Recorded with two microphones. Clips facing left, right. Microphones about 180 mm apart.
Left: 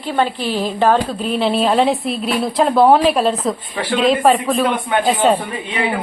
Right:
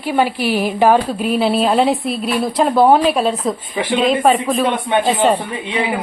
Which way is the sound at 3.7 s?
15° right (ahead or behind).